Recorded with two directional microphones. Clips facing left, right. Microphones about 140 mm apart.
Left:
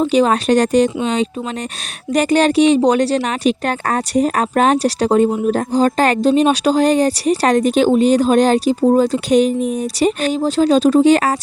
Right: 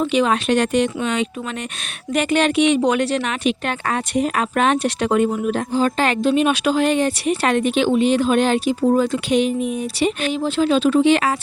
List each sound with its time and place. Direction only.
0.0 s a woman's voice: 35° left (ahead or behind)